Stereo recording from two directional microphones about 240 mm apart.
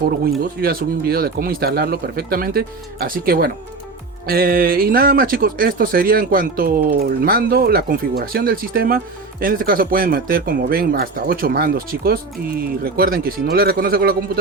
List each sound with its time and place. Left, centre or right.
0.3 s speech: right